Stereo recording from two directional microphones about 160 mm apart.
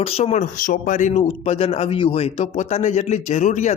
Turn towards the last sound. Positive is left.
turn(degrees=50)  # may be behind; listen again after turning